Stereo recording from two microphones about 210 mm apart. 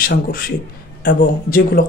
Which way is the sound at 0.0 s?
45° left (ahead or behind).